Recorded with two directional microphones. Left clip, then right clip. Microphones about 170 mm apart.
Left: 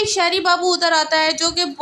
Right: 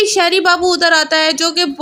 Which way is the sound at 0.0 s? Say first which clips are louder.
Right 5 dB; 20° right (ahead or behind).